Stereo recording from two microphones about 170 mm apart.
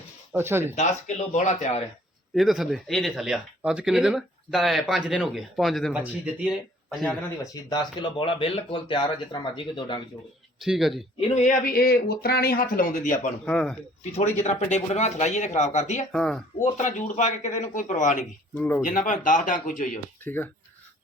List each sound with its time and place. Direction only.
0.3 s speech: 15° right (ahead or behind)
0.8 s speech: 45° left (ahead or behind)
2.3 s speech: centre (ahead or behind)
7.5 s speech: 25° left (ahead or behind)
10.6 s speech: centre (ahead or behind)
11.2 s a man's voice: 40° left (ahead or behind)
11.6 s speech: 60° left (ahead or behind)
13.4 s speech: 5° left (ahead or behind)
14.1 s speech: 40° left (ahead or behind)
16.1 s speech: 5° left (ahead or behind)
16.6 s speech: 45° left (ahead or behind)
18.5 s speech: 10° left (ahead or behind)
18.9 s speech: 50° left (ahead or behind)
20.2 s speech: 10° left (ahead or behind)